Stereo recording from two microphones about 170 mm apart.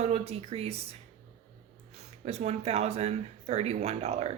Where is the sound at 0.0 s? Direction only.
35° right (ahead or behind).